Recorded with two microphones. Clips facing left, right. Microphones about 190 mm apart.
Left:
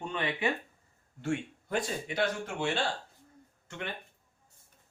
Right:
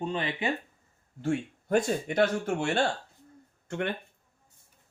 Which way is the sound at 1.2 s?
45° right (ahead or behind).